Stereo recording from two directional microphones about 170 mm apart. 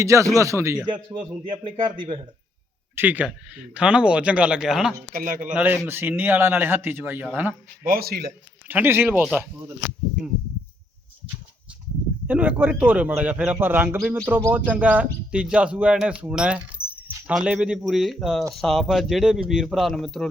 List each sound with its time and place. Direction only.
0.0 s speech: 20° right (ahead or behind)
0.9 s a man's voice: 25° right (ahead or behind)
2.9 s a man's voice: 10° right (ahead or behind)
5.1 s a man's voice: 55° right (ahead or behind)
5.5 s speech: 10° right (ahead or behind)
7.9 s speech: 60° right (ahead or behind)
8.6 s speech: 10° right (ahead or behind)
12.3 s a man's voice: 10° right (ahead or behind)